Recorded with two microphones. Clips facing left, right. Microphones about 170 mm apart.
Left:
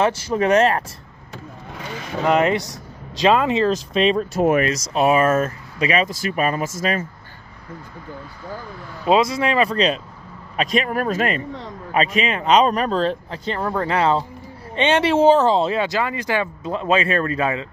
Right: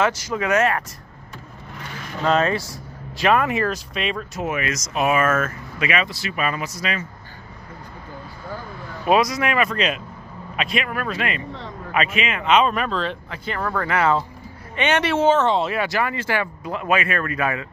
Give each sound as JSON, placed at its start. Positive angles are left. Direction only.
{"t": 0.0, "sound": "speech", "side_deg": 30}
{"t": 2.2, "sound": "speech", "side_deg": 15}
{"t": 9.0, "sound": "speech", "side_deg": 25}
{"t": 13.6, "sound": "speech", "side_deg": 25}